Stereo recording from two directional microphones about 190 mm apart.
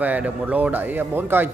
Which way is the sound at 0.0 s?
5° right (ahead or behind).